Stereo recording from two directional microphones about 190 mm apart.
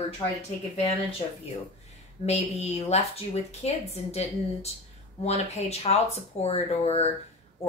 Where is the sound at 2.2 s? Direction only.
35° left (ahead or behind).